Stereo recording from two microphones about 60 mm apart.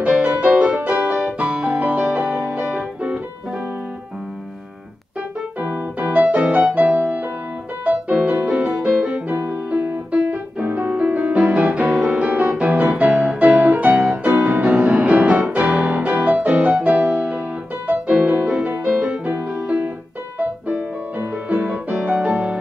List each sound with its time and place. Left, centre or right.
0.0 s music: right
2.1 s music: centre
2.7 s music: right
5.6 s music: right
8.8 s piano: right
9.7 s music: right
18.5 s music: centre
20.3 s music: right